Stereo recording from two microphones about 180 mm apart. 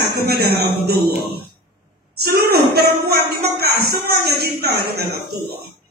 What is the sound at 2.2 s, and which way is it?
Speech, 60° right (ahead or behind).